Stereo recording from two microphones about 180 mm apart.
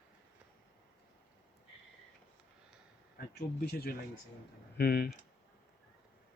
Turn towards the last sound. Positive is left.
turn(degrees=60)  # may be behind; listen again after turning